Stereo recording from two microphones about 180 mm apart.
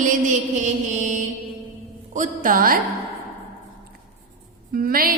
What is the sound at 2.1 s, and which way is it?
Speech, 45° right (ahead or behind).